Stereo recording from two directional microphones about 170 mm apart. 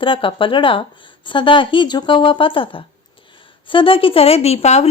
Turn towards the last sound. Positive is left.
turn(degrees=40)  # may be behind; listen again after turning